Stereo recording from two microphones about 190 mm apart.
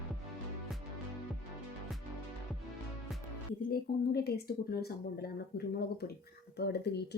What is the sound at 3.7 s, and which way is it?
Speech, 55° left (ahead or behind).